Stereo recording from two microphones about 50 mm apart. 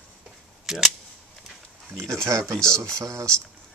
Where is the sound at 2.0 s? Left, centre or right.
Right.